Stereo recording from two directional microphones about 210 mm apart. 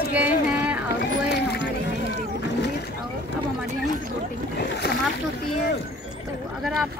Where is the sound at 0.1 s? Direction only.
5° right (ahead or behind).